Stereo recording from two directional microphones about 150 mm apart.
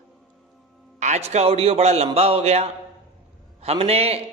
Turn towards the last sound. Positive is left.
turn(degrees=-40)  # may be behind; listen again after turning